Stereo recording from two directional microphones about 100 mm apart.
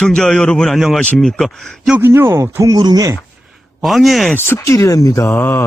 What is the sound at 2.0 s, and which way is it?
Speech, 25° right (ahead or behind).